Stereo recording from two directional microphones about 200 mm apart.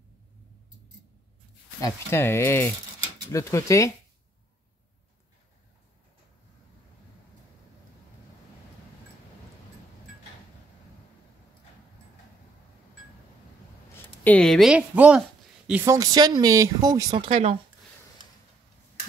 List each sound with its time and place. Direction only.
1.8 s speech: 15° left (ahead or behind)
14.2 s a woman's voice: 5° left (ahead or behind)
15.8 s speech: 15° right (ahead or behind)